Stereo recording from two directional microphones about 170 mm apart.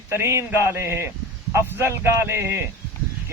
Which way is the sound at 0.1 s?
15° right (ahead or behind).